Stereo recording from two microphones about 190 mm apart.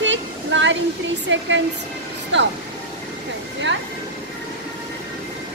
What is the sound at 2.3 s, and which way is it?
Speech, 70° right (ahead or behind).